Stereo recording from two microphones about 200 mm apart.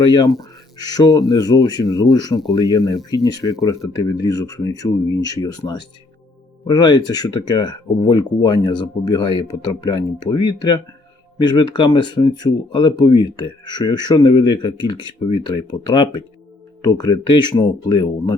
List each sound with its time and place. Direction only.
0.0 s speech: 20° left (ahead or behind)